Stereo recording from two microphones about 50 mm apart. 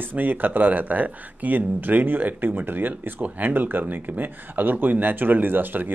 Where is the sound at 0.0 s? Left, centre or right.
Right.